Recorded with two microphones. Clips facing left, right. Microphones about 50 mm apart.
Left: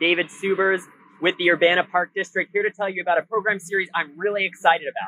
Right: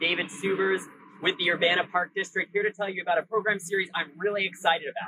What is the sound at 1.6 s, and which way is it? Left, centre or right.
Speech, left.